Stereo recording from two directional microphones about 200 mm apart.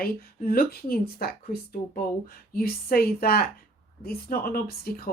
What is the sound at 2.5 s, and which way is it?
A woman's voice, 50° left (ahead or behind).